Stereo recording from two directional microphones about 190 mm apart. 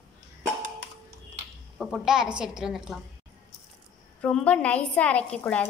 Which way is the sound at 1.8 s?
Centre (ahead or behind).